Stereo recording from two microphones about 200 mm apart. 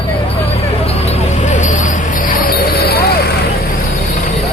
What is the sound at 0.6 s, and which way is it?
Vehicle, 30° left (ahead or behind).